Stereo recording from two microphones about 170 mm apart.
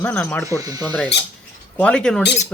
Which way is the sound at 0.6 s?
20° right (ahead or behind).